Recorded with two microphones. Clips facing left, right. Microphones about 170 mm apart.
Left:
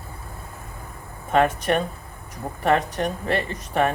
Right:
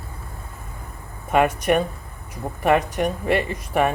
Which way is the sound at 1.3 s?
15° right (ahead or behind).